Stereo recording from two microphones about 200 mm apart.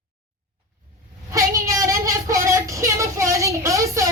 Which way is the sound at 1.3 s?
15° right (ahead or behind).